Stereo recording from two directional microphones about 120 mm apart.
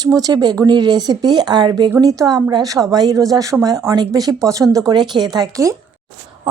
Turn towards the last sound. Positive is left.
turn(degrees=-30)  # may be behind; listen again after turning